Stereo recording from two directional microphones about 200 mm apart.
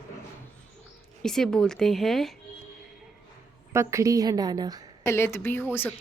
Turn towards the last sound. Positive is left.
turn(degrees=10)  # may be behind; listen again after turning